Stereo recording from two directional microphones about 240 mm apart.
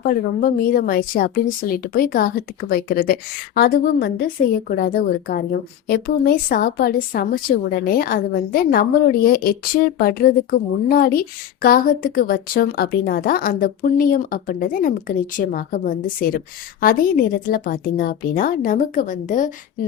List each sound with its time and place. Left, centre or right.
0.0 s a woman's voice: left